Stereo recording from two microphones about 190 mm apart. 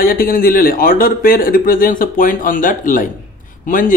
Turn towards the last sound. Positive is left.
turn(degrees=45)  # may be behind; listen again after turning